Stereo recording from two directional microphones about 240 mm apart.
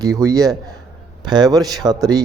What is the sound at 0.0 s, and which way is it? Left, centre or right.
A man's voice, centre.